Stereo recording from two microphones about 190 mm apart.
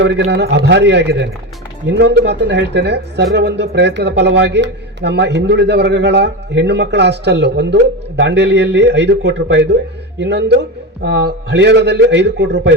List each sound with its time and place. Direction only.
0.0 s speech: 65° right (ahead or behind)